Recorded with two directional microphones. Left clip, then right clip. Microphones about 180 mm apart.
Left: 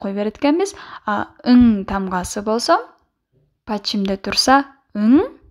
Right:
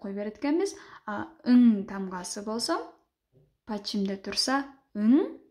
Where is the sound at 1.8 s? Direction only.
35° left (ahead or behind).